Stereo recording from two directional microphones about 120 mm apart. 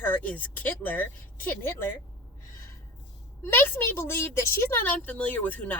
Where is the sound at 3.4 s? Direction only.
20° left (ahead or behind).